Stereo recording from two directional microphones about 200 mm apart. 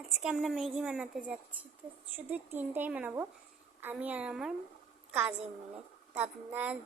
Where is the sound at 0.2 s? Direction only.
Centre (ahead or behind).